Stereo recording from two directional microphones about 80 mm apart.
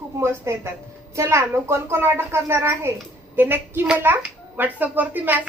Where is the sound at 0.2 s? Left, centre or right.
Right.